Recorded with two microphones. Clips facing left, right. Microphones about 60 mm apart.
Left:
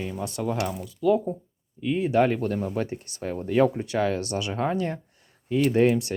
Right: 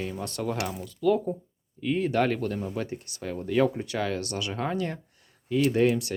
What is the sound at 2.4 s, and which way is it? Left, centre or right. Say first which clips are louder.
Speech: left 3 dB; left.